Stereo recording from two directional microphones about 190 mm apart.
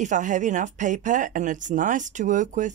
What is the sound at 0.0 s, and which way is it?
A woman's voice, 40° right (ahead or behind).